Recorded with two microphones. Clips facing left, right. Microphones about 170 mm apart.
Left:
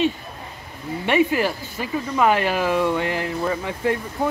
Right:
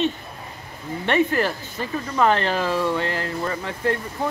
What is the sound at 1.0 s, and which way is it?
Speech, 10° left (ahead or behind).